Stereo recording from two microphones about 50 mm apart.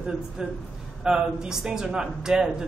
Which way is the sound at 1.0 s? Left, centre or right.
Centre.